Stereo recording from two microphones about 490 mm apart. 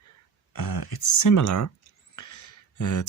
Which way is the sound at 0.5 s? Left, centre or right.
Left.